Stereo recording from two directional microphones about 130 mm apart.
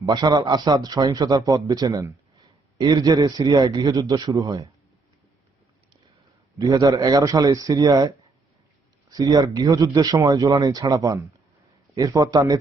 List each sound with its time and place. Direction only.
0.0 s speech: 30° right (ahead or behind)
6.6 s speech: 25° right (ahead or behind)